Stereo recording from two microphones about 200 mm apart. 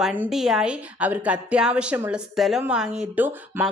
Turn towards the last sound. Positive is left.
turn(degrees=-5)  # may be behind; listen again after turning